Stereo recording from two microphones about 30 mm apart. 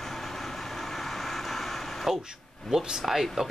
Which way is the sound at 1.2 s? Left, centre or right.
Centre.